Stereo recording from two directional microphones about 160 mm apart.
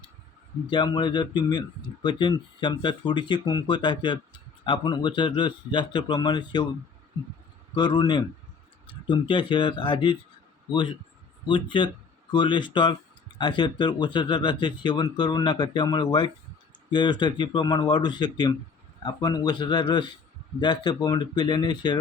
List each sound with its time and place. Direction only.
0.7 s speech: 30° left (ahead or behind)
7.8 s speech: 25° left (ahead or behind)